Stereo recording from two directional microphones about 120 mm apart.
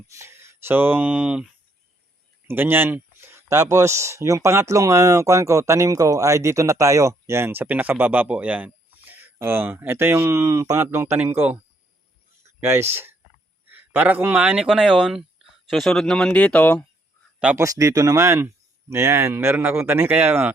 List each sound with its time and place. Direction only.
0.1 s speech: 20° right (ahead or behind)
2.5 s speech: 20° right (ahead or behind); by 16.8 s 10° left (ahead or behind)
17.6 s speech: 25° right (ahead or behind)